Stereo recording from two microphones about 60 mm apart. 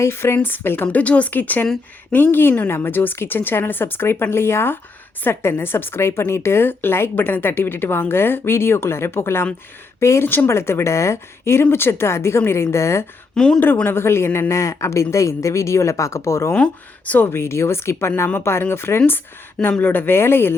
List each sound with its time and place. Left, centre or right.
0.0 s speech: left
0.9 s speech: left
10.0 s speech: left
10.2 s speech: left
13.3 s a woman's voice: centre
13.8 s speech: left
14.5 s speech: left